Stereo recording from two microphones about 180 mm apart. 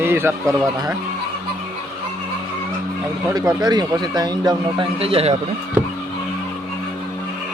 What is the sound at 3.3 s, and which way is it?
A man's voice, 20° right (ahead or behind).